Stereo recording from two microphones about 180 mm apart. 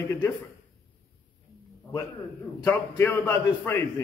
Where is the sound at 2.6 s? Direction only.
15° left (ahead or behind).